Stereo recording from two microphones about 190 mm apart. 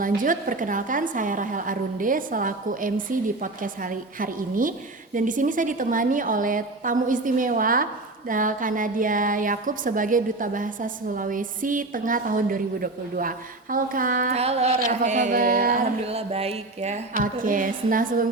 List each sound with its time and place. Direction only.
0.0 s a woman's voice: 45° right (ahead or behind)
16.0 s a woman's voice: 30° right (ahead or behind)